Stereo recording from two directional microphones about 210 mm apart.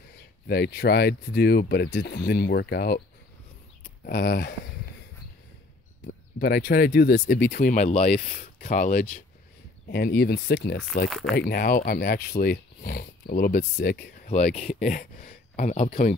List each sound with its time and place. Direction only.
0.5 s speech: 50° left (ahead or behind)
4.0 s speech: 45° left (ahead or behind)
6.0 s speech: 50° left (ahead or behind)
9.8 s speech: 50° left (ahead or behind)
11.1 s speech: centre (ahead or behind)
11.3 s speech: 45° left (ahead or behind)
14.3 s speech: 30° left (ahead or behind)